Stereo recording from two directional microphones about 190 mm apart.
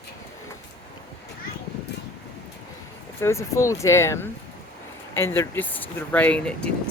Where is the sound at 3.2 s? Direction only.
15° left (ahead or behind).